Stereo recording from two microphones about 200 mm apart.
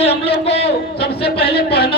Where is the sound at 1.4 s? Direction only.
50° left (ahead or behind).